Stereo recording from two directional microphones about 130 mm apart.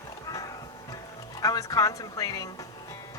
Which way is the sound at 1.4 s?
30° left (ahead or behind).